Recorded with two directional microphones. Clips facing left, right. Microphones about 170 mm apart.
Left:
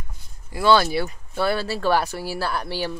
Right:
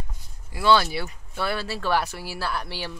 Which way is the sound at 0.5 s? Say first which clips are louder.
Left 3 dB; 45° left (ahead or behind).